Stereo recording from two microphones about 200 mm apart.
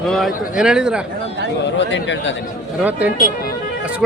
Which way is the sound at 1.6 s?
65° left (ahead or behind).